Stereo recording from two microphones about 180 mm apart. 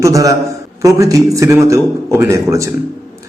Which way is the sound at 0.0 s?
20° right (ahead or behind).